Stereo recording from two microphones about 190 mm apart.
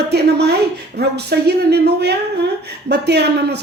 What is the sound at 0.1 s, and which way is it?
A woman's voice, 60° right (ahead or behind).